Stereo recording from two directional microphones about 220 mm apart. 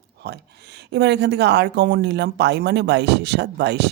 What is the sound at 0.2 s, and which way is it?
Speech, 45° right (ahead or behind).